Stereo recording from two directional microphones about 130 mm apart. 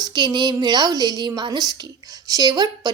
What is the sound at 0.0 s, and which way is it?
A woman's voice, 35° right (ahead or behind).